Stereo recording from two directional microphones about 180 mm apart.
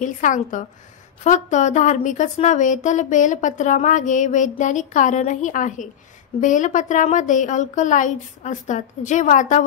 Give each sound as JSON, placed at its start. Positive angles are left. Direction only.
{"t": 0.0, "sound": "a woman's voice", "side_deg": 45}